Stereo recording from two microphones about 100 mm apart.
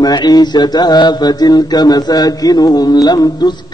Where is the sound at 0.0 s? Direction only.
45° left (ahead or behind).